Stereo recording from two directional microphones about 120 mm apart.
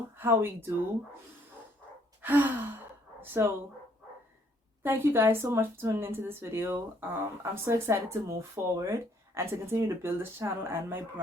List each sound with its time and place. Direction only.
0.2 s speech: 20° right (ahead or behind)
2.2 s sigh: 15° right (ahead or behind)
3.2 s speech: 20° right (ahead or behind)
4.8 s speech: 20° right (ahead or behind)